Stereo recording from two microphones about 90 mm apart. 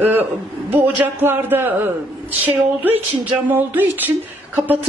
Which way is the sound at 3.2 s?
20° right (ahead or behind).